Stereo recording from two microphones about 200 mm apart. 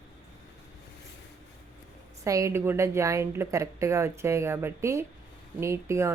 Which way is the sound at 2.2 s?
15° right (ahead or behind).